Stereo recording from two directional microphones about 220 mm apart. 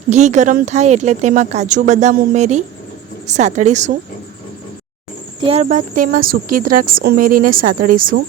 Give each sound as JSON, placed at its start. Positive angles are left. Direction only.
{"t": 0.1, "sound": "speech", "side_deg": -35}
{"t": 5.4, "sound": "speech", "side_deg": -25}
{"t": 5.6, "sound": "speech", "side_deg": -35}